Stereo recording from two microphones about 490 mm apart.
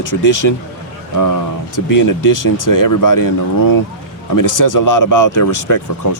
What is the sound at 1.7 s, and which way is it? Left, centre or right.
Speech, left.